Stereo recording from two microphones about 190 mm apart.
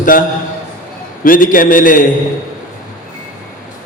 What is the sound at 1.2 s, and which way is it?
Speech, 45° left (ahead or behind).